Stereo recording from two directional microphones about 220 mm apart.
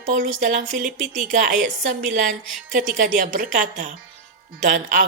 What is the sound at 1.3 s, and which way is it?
A woman's voice, 35° right (ahead or behind).